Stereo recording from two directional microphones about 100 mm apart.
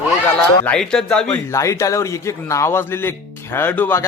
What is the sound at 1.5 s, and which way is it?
Speech, 30° left (ahead or behind).